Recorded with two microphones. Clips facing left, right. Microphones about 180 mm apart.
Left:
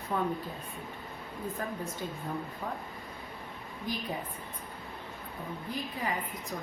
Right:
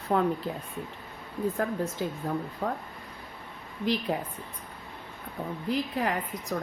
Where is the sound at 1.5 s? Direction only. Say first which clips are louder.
Right 7 dB; 75° right (ahead or behind).